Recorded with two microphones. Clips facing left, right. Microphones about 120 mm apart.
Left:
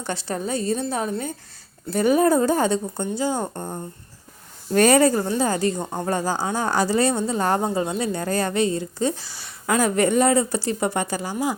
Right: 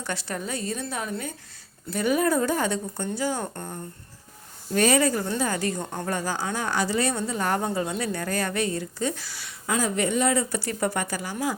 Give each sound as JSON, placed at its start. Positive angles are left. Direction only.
{"t": 0.0, "sound": "a woman's voice", "side_deg": 30}
{"t": 4.7, "sound": "a woman's voice", "side_deg": 45}
{"t": 5.8, "sound": "speech", "side_deg": 10}
{"t": 6.1, "sound": "speech", "side_deg": 30}
{"t": 9.6, "sound": "a woman's voice", "side_deg": 60}
{"t": 10.3, "sound": "speech", "side_deg": 30}